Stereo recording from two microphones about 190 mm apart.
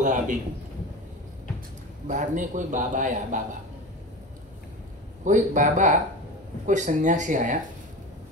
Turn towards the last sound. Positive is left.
turn(degrees=-40)  # may be behind; listen again after turning